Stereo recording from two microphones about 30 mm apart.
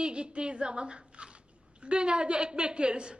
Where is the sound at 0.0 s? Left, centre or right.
Right.